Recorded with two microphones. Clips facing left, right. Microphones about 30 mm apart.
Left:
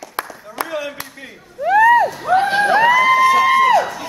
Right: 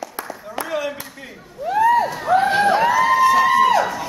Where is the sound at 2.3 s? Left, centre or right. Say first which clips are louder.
Even; centre.